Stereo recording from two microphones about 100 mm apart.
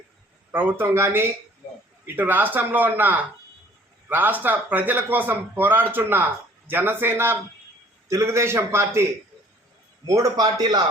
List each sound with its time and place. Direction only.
0.5 s a man's voice: 20° right (ahead or behind)
10.1 s a man's voice: 35° right (ahead or behind)